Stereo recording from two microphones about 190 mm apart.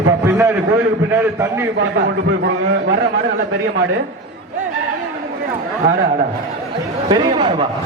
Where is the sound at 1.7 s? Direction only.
60° right (ahead or behind).